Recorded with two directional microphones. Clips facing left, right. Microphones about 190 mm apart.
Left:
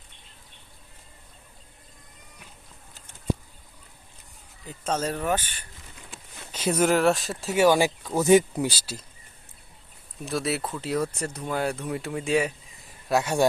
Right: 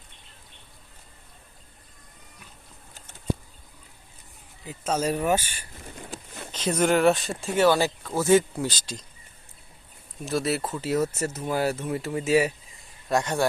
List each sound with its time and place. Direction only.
4.6 s speech: 5° right (ahead or behind)
6.0 s a sound: 50° right (ahead or behind)
6.5 s speech: 10° left (ahead or behind)
10.2 s speech: centre (ahead or behind)
13.1 s speech: 5° left (ahead or behind)